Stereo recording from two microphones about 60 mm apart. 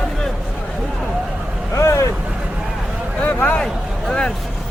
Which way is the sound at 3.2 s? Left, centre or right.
Left.